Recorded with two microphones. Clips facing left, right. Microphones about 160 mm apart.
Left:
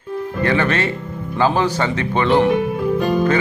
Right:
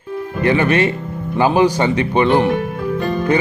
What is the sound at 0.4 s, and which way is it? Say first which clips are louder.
Speech: right 4 dB; 15° right (ahead or behind).